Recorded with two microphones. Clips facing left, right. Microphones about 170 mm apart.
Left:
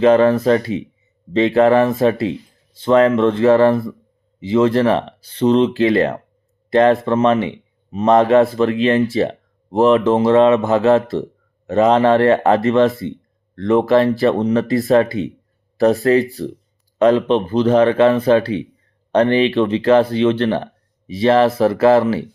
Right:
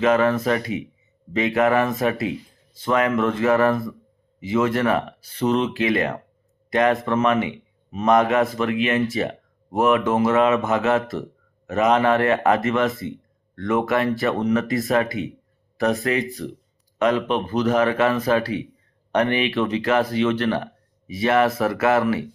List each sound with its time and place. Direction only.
0.0 s speech: 30° left (ahead or behind)